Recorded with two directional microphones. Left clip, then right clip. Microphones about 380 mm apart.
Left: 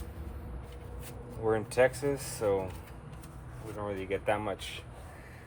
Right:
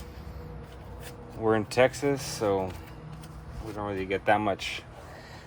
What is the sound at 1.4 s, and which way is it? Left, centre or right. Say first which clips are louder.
Speech: right 3 dB; right.